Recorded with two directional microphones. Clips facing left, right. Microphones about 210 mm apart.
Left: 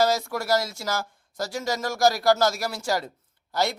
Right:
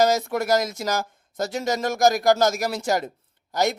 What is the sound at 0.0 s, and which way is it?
A man's voice, 20° right (ahead or behind).